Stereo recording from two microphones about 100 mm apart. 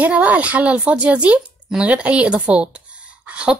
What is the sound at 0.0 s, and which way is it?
Speech, 15° right (ahead or behind).